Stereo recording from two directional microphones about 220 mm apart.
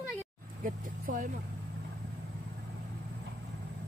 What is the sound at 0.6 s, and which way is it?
Vehicle, 35° right (ahead or behind).